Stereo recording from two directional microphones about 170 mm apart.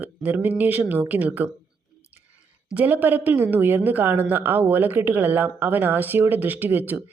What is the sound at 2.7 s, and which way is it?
Speech, 10° right (ahead or behind).